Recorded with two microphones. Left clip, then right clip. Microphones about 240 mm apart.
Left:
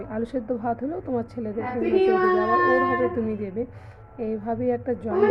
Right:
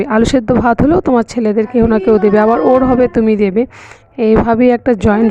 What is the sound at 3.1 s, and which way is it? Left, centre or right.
Speech, right.